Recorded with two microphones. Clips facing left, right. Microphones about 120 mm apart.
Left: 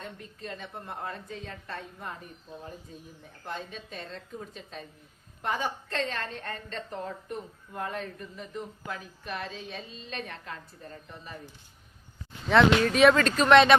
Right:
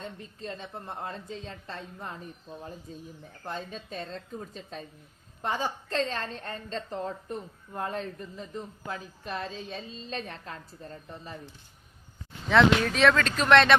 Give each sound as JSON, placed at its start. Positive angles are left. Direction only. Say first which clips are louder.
{"t": 0.3, "sound": "speech", "louder": "right 1 dB", "side_deg": -30}
{"t": 12.5, "sound": "speech", "louder": "left 1 dB", "side_deg": 0}